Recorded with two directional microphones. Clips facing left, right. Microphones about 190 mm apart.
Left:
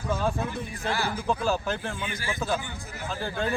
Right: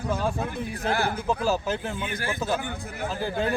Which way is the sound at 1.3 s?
5° right (ahead or behind).